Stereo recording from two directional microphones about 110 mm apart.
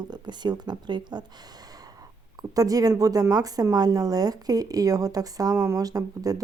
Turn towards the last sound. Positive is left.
turn(degrees=-35)  # may be behind; listen again after turning